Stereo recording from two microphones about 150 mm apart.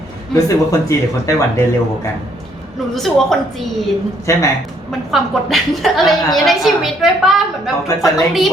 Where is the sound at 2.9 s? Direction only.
Centre (ahead or behind).